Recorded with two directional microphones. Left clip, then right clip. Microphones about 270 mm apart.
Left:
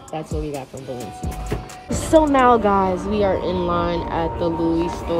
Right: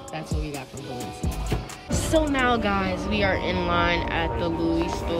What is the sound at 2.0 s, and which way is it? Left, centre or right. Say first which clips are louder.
Speech: left 8 dB; centre.